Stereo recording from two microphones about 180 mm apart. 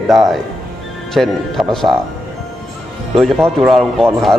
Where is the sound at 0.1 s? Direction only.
Centre (ahead or behind).